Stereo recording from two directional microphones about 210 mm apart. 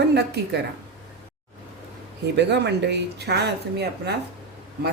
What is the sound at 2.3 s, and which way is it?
A woman's voice, 55° right (ahead or behind).